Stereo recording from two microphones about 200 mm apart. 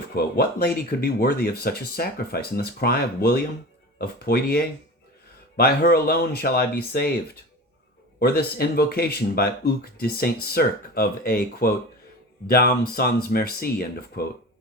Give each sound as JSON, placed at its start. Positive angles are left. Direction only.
{"t": 0.2, "sound": "speech", "side_deg": 50}
{"t": 8.2, "sound": "speech", "side_deg": 50}